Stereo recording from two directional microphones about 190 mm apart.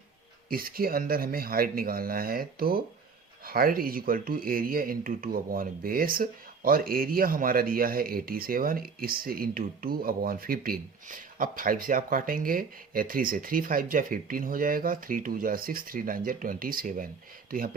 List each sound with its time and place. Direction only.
0.5 s speech: 50° right (ahead or behind)